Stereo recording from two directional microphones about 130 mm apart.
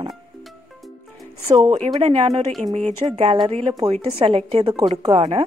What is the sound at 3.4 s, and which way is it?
A woman's voice, 50° right (ahead or behind).